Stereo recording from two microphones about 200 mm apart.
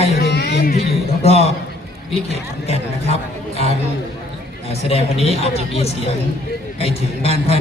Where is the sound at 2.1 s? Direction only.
30° left (ahead or behind).